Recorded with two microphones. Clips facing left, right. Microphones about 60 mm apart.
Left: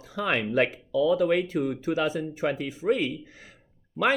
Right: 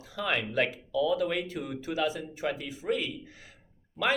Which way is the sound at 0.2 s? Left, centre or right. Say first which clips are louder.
Left 4 dB; left.